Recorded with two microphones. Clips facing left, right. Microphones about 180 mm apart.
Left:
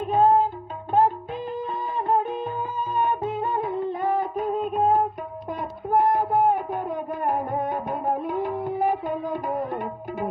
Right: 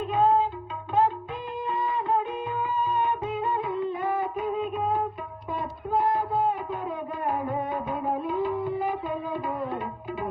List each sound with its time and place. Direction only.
0.1 s music: 40° left (ahead or behind)
1.6 s music: 40° left (ahead or behind)
5.5 s a sound: 80° left
6.4 s music: 45° left (ahead or behind)